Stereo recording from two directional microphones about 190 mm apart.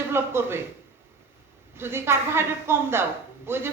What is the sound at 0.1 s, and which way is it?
Speech, 10° right (ahead or behind).